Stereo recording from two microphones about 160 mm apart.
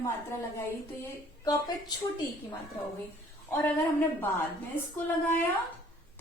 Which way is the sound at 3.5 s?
15° left (ahead or behind).